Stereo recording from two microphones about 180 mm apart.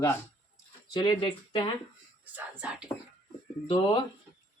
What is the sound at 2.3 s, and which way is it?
Speech, 5° right (ahead or behind).